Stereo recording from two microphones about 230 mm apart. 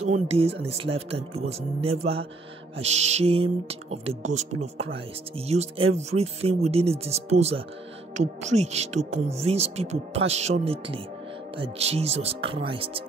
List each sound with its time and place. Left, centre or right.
0.0 s speech: right